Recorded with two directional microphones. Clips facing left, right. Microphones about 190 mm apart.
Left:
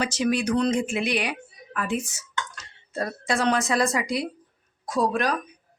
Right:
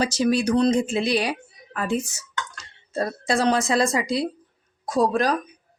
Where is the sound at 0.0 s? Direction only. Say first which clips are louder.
Right 3 dB; 35° right (ahead or behind).